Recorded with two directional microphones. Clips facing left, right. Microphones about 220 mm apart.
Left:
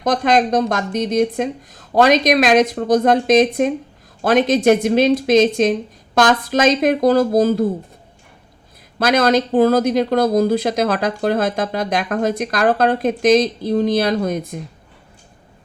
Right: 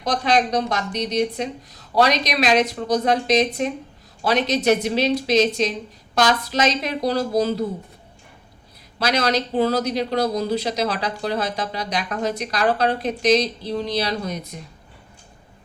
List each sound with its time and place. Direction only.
0.0 s speech: 50° left (ahead or behind)
9.0 s speech: 50° left (ahead or behind)